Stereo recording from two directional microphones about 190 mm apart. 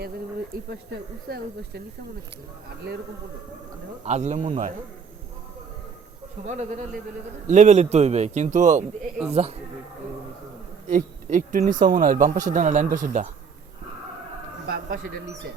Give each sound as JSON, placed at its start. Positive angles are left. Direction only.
{"t": 0.5, "sound": "speech", "side_deg": -50}
{"t": 4.0, "sound": "a man's voice", "side_deg": -35}
{"t": 6.5, "sound": "a man's voice", "side_deg": -40}
{"t": 10.8, "sound": "speech", "side_deg": -40}
{"t": 14.7, "sound": "a man's voice", "side_deg": -50}